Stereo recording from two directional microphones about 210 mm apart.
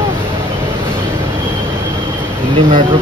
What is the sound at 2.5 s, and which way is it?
Speech, 25° right (ahead or behind).